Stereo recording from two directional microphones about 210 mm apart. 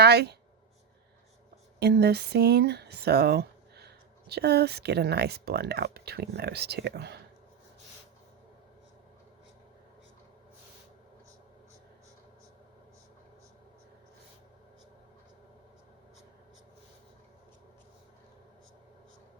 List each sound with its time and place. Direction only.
0.0 s speech: 50° right (ahead or behind)
1.8 s speech: 50° right (ahead or behind)